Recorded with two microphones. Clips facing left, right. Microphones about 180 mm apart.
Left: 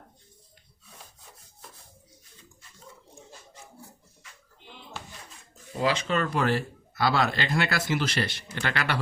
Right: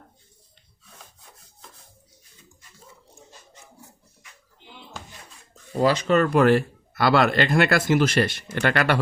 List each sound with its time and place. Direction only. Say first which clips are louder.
5.7 s speech: right 7 dB; 40° right (ahead or behind)